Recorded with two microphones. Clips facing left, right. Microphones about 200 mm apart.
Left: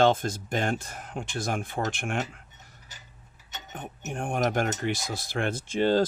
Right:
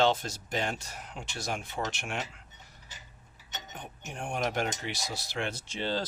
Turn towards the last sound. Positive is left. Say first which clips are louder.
# left 10 dB
turn(degrees=50)  # may be behind; listen again after turning